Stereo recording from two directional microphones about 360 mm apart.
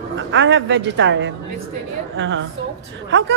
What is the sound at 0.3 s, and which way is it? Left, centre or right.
A man's voice, right.